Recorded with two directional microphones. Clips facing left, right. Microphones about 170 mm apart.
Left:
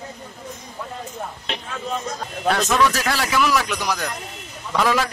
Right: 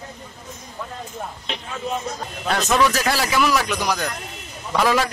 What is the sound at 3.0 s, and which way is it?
A man's voice, centre (ahead or behind).